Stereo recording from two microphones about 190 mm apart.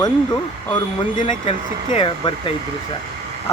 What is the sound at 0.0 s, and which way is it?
Speech, 20° left (ahead or behind).